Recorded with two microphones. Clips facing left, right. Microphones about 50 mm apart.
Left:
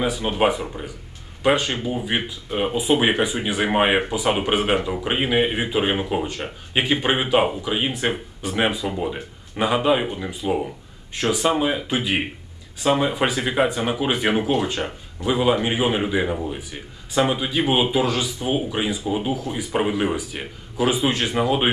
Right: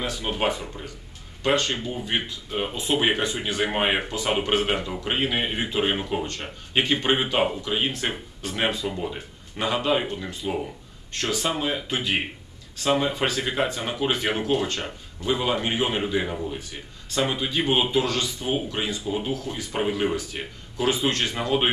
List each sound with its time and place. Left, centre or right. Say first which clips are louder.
0.0 s speech: left 6 dB; centre